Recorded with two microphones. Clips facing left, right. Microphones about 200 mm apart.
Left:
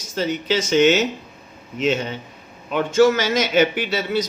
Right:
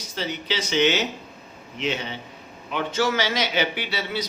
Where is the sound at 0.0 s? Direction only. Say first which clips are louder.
Left 7 dB; 45° left (ahead or behind).